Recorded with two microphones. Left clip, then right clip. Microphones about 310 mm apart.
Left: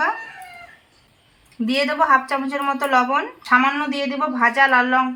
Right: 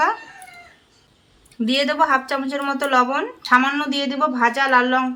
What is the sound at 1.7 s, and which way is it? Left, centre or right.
A woman's voice, centre.